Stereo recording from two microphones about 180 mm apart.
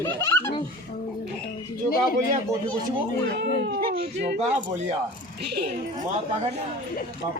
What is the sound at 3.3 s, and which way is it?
Speech, 55° right (ahead or behind).